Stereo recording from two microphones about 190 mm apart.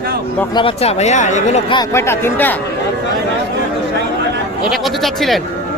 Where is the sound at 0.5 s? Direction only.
30° left (ahead or behind).